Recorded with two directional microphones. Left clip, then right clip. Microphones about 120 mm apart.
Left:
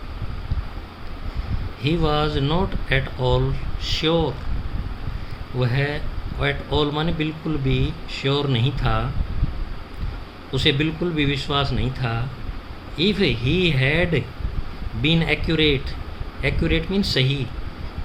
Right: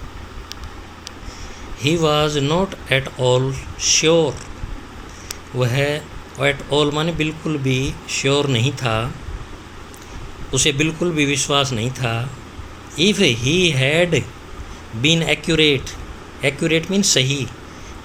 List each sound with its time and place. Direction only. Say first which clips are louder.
1.8 s speech: right 5 dB; 20° right (ahead or behind)
5.5 s speech: right 5 dB; 20° right (ahead or behind)
10.5 s speech: right 3 dB; 20° right (ahead or behind)